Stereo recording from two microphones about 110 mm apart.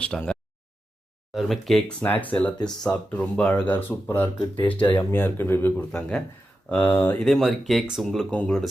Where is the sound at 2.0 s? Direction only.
15° left (ahead or behind).